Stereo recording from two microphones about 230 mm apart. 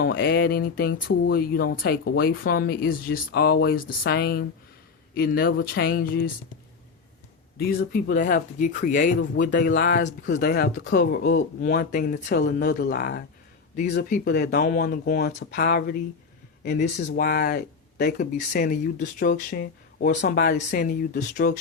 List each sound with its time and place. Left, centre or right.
0.0 s speech: left
7.8 s speech: left